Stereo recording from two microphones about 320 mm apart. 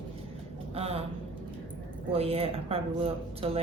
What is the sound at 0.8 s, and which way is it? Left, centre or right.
Speech, centre.